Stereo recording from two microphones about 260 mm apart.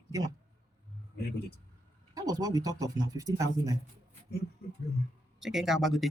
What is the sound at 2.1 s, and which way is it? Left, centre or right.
Speech, centre.